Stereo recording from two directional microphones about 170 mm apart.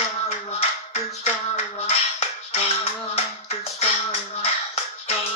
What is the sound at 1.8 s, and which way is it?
Music, 35° left (ahead or behind).